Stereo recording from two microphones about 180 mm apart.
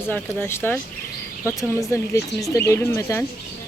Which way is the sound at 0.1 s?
10° left (ahead or behind).